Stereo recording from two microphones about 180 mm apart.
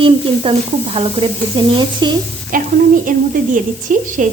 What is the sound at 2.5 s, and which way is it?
A woman's voice, 50° right (ahead or behind).